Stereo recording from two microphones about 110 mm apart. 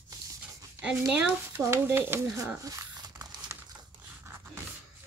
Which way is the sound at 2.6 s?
30° right (ahead or behind).